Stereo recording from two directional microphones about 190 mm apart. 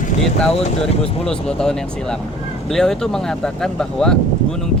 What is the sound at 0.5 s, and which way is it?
Speech, 30° left (ahead or behind).